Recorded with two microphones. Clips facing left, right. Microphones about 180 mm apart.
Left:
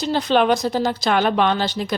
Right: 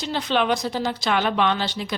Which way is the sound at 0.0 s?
40° left (ahead or behind).